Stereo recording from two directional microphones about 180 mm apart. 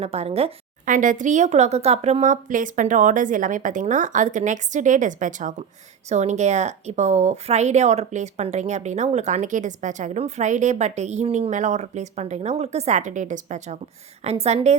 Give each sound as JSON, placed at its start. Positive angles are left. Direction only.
{"t": 0.0, "sound": "a woman's voice", "side_deg": -35}
{"t": 0.9, "sound": "a woman's voice", "side_deg": -45}